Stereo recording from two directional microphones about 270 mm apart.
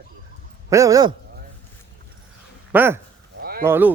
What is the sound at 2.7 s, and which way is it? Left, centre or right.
Speech, centre.